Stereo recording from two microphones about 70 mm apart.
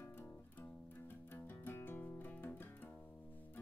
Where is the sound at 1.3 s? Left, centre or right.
Left.